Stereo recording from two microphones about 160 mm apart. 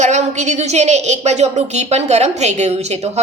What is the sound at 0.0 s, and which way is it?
A woman's voice, 45° right (ahead or behind).